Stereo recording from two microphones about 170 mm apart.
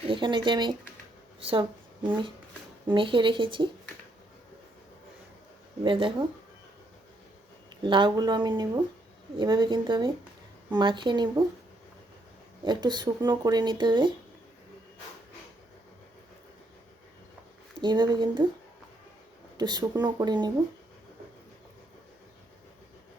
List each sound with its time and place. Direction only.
0.1 s a woman's voice: 30° right (ahead or behind)
2.9 s speech: 30° right (ahead or behind)
5.8 s speech: 30° right (ahead or behind)
7.7 s speech: 30° right (ahead or behind)
12.6 s speech: 25° right (ahead or behind)
17.7 s speech: 25° right (ahead or behind)
19.5 s speech: 25° right (ahead or behind)